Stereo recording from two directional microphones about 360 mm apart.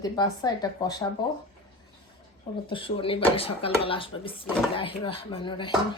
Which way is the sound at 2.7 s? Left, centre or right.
Centre.